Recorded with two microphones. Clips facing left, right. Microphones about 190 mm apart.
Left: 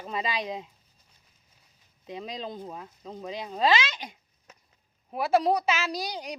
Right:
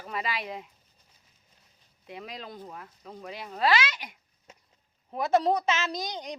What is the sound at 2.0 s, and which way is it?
Speech, 20° left (ahead or behind).